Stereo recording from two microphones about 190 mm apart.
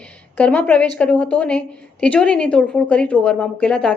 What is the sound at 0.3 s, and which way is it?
A woman's voice, 10° left (ahead or behind).